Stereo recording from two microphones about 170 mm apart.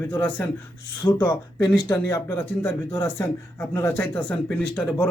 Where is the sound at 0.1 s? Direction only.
10° left (ahead or behind).